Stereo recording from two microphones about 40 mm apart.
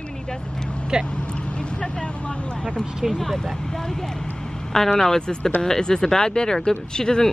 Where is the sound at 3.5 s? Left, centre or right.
Centre.